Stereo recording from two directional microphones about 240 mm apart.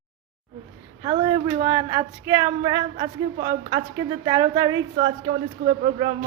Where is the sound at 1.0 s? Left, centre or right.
Right.